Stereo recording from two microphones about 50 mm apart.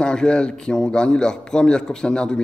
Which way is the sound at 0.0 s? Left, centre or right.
Centre.